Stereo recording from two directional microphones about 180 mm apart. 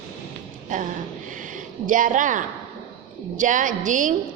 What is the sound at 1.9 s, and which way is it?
A woman's voice, 45° right (ahead or behind).